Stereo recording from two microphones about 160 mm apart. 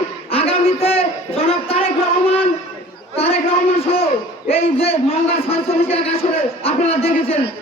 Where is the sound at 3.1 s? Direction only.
40° left (ahead or behind).